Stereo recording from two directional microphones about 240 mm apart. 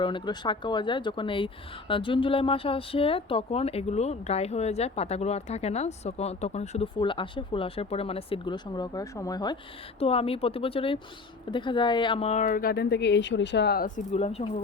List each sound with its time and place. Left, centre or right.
0.0 s speech: centre